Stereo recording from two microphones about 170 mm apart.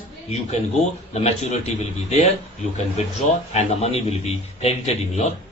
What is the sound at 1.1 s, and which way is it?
A man's voice, 40° left (ahead or behind).